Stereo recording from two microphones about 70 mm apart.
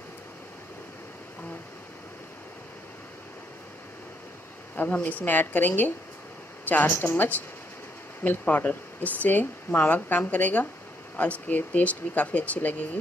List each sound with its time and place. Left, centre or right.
4.7 s speech: left